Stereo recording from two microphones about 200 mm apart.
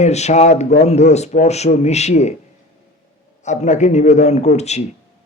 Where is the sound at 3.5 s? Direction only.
35° left (ahead or behind).